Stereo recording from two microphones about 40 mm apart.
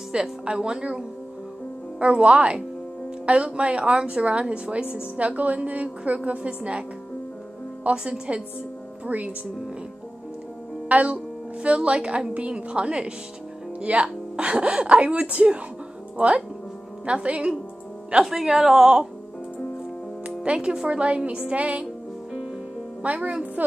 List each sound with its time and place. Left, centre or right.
0.1 s a woman's voice: right
7.9 s speech: right
9.0 s a woman's voice: right
10.9 s a woman's voice: right
18.2 s a woman's voice: centre
20.2 s a woman's voice: right
23.0 s a woman's voice: right